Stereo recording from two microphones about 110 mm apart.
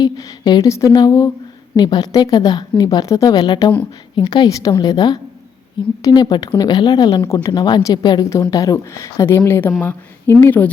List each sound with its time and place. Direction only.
0.0 s a woman's voice: 40° left (ahead or behind); by 10.7 s 15° left (ahead or behind)